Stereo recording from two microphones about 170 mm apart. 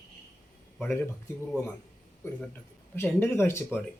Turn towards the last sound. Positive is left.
turn(degrees=15)  # may be behind; listen again after turning